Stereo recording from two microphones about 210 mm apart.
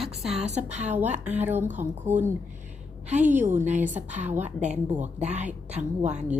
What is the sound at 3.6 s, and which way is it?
A woman's voice, 35° right (ahead or behind).